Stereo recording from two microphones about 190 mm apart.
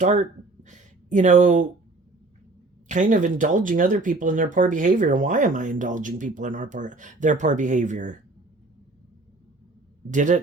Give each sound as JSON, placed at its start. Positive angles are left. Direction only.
{"t": 0.0, "sound": "speech", "side_deg": -40}
{"t": 0.7, "sound": "a sound", "side_deg": -40}
{"t": 2.9, "sound": "speech", "side_deg": -40}
{"t": 10.1, "sound": "speech", "side_deg": -40}